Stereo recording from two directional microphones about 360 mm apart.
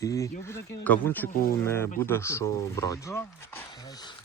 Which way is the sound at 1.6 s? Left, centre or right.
Centre.